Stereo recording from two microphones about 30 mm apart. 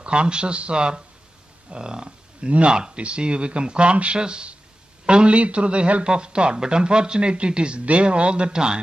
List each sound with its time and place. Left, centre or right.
0.0 s speech: right
1.7 s a sound: right
2.0 s speech: right
2.7 s a sound: right
3.0 s a man's voice: right
6.0 s speech: right